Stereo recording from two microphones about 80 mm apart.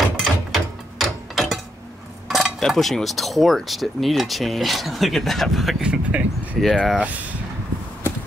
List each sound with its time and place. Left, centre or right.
0.2 s a sound: centre
2.2 s speech: centre
5.8 s speech: centre
6.6 s speech: centre
7.0 s speech: centre